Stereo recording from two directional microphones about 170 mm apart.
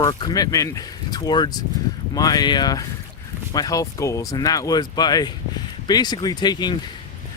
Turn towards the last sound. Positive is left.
turn(degrees=25)  # may be behind; listen again after turning